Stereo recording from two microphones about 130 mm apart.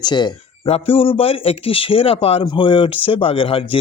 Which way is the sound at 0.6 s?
50° left (ahead or behind).